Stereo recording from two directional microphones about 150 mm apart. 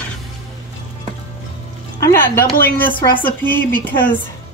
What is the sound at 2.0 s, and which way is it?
Speech, 15° left (ahead or behind).